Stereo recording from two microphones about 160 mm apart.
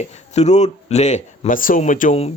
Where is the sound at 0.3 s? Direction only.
45° left (ahead or behind).